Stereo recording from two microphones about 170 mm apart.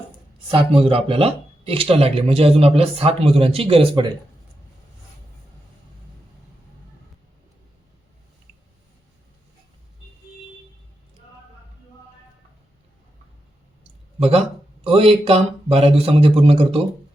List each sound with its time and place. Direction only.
0.5 s speech: 30° right (ahead or behind)
14.2 s speech: 35° right (ahead or behind)